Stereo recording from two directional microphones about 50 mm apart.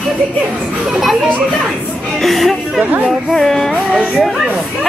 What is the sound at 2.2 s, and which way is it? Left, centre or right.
A child's voice, centre.